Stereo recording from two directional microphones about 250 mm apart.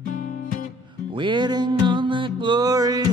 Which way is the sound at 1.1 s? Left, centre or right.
Centre.